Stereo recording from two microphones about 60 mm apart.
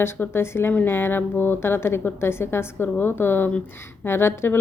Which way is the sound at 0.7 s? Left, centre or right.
Left.